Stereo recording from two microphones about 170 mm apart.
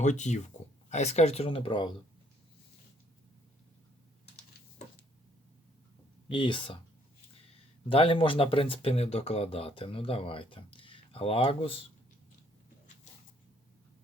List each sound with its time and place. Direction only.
0.0 s speech: 45° left (ahead or behind)
6.2 s speech: 30° left (ahead or behind)
7.9 s speech: 35° left (ahead or behind)